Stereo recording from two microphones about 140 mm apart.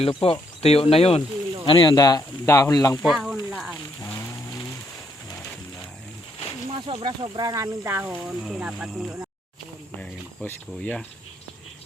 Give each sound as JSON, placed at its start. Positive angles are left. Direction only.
{"t": 0.0, "sound": "speech", "side_deg": 40}
{"t": 1.6, "sound": "speech", "side_deg": 35}
{"t": 3.0, "sound": "speech", "side_deg": 0}
{"t": 3.5, "sound": "a sound", "side_deg": 0}
{"t": 4.0, "sound": "a sound", "side_deg": 20}
{"t": 6.7, "sound": "speech", "side_deg": -35}
{"t": 8.2, "sound": "speech", "side_deg": -5}
{"t": 10.0, "sound": "cricket", "side_deg": 10}